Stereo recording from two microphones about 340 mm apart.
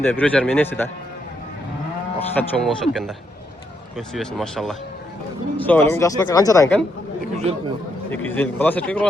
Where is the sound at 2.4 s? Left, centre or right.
Centre.